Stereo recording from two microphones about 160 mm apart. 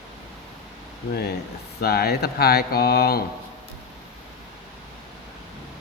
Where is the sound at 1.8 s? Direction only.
80° left.